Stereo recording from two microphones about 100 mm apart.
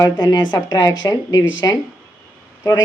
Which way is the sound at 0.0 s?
45° left (ahead or behind).